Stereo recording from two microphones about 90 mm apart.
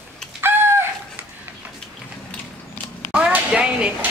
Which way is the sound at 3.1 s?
10° right (ahead or behind).